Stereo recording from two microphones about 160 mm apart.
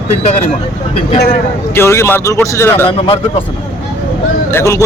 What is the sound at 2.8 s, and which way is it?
Speech, 30° left (ahead or behind).